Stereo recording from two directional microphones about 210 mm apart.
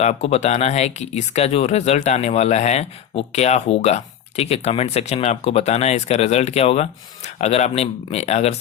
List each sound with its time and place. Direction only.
0.0 s speech: 30° left (ahead or behind)